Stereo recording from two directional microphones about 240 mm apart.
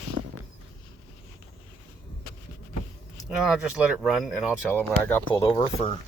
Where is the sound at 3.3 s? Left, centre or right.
Centre.